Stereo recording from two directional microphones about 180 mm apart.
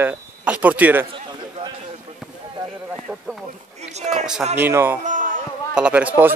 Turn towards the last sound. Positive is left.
turn(degrees=-10)  # may be behind; listen again after turning